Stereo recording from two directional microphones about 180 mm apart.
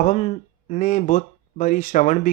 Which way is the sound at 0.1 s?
35° left (ahead or behind).